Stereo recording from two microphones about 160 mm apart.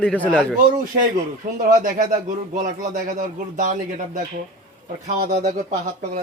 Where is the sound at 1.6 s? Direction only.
55° right (ahead or behind).